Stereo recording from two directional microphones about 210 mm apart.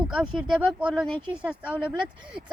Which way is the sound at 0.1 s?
5° right (ahead or behind).